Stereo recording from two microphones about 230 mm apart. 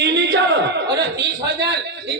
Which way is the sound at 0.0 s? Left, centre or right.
Right.